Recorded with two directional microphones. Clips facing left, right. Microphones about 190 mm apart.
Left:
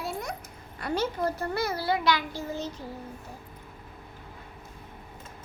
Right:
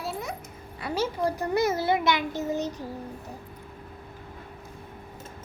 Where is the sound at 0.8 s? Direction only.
5° right (ahead or behind).